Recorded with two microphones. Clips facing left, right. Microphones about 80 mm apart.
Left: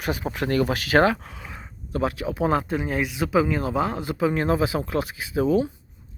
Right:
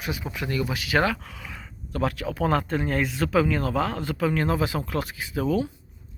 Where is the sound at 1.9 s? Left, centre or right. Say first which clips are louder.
Left 2 dB; left.